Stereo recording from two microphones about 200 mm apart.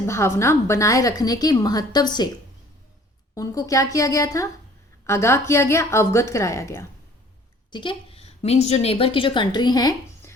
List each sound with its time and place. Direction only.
0.0 s a woman's voice: 15° left (ahead or behind)
3.3 s a woman's voice: 15° left (ahead or behind)